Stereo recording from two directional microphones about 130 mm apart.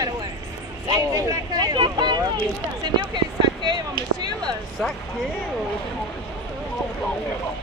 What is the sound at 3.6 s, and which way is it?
Speech, 35° right (ahead or behind).